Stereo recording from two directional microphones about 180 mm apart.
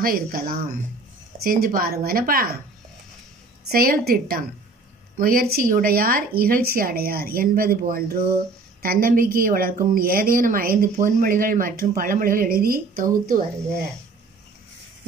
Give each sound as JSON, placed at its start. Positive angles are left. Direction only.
{"t": 0.0, "sound": "a woman's voice", "side_deg": -55}
{"t": 3.7, "sound": "a woman's voice", "side_deg": -55}